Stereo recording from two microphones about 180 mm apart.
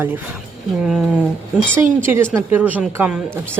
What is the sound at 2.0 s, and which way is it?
Speech, 15° right (ahead or behind).